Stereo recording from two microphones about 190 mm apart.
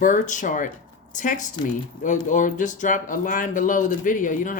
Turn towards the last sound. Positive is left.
turn(degrees=45)  # may be behind; listen again after turning